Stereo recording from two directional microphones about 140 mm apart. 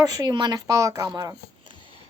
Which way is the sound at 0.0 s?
30° right (ahead or behind).